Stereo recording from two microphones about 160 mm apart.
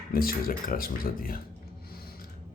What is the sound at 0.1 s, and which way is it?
Speech, 65° left (ahead or behind).